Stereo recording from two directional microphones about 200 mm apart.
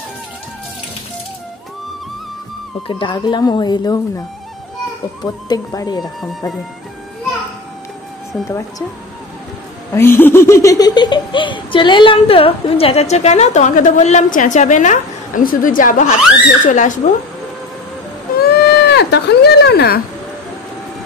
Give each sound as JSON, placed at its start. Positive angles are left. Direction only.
{"t": 2.9, "sound": "speech", "side_deg": 25}
{"t": 5.2, "sound": "speech", "side_deg": 20}
{"t": 6.2, "sound": "speech", "side_deg": 0}
{"t": 8.5, "sound": "speech", "side_deg": 15}
{"t": 9.9, "sound": "speech", "side_deg": 10}
{"t": 18.5, "sound": "speech", "side_deg": 55}